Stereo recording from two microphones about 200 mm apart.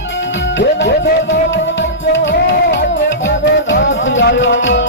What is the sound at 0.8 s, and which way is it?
Music, 60° left (ahead or behind).